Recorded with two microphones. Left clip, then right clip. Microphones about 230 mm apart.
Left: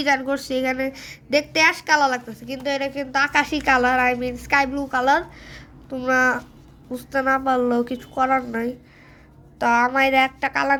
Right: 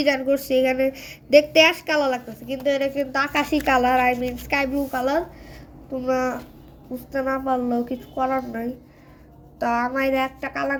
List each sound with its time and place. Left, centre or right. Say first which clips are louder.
0.0 s a woman's voice: even; left
0.6 s a woman's voice: right 3 dB; left